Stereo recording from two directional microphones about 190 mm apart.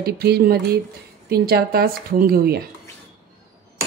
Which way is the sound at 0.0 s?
55° right (ahead or behind).